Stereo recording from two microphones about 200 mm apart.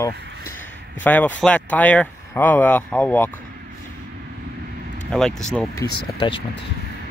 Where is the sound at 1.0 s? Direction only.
10° left (ahead or behind).